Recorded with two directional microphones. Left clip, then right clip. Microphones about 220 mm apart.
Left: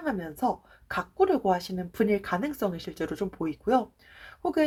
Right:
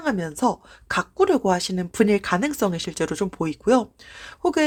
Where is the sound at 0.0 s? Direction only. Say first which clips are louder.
Right 6 dB; 40° right (ahead or behind).